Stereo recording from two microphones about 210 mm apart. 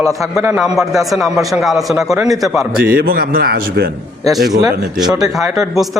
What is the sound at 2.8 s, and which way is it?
A man's voice, 45° right (ahead or behind).